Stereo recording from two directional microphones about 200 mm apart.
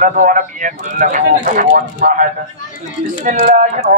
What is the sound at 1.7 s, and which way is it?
Speech, 55° right (ahead or behind).